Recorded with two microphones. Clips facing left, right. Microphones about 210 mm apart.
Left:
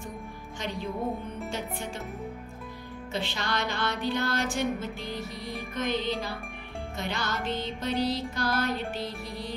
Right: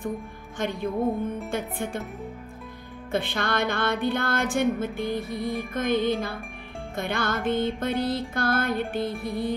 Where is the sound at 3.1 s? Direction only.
55° right (ahead or behind).